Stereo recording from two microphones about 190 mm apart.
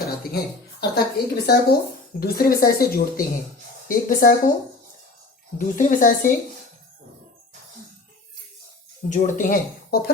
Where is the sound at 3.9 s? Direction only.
45° left (ahead or behind).